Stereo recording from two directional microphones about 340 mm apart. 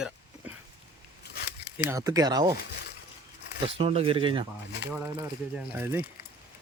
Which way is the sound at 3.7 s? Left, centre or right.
Centre.